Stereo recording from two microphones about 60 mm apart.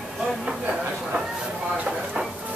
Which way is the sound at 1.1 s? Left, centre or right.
Centre.